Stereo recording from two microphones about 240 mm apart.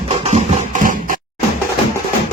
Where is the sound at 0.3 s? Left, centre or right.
Right.